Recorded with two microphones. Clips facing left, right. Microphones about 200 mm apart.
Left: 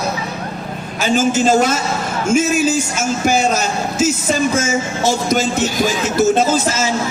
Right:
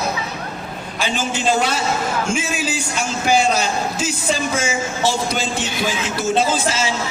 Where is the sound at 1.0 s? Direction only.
45° left (ahead or behind).